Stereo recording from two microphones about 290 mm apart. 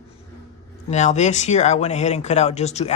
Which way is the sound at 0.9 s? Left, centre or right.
Left.